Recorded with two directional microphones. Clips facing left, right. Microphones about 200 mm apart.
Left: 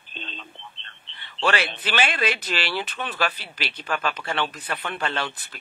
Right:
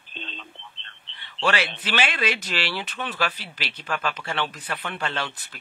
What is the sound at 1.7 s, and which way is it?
Speech, 50° left (ahead or behind).